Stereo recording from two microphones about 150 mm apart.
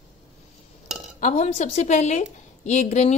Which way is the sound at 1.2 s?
55° left (ahead or behind).